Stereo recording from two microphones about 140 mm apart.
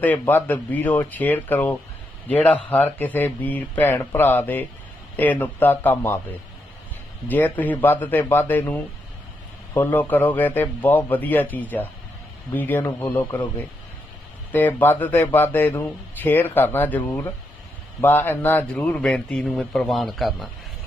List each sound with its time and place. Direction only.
0.0 s speech: 15° left (ahead or behind)
7.3 s speech: 15° left (ahead or behind)